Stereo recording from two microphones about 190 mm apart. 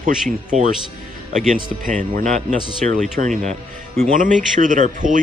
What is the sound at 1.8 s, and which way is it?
A man's voice, 45° right (ahead or behind).